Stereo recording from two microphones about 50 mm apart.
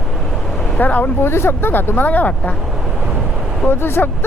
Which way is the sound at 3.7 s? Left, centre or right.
Left.